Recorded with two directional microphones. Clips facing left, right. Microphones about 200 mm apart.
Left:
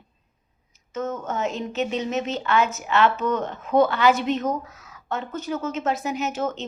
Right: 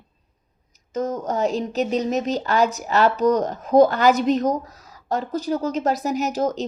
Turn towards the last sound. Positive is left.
turn(degrees=-35)  # may be behind; listen again after turning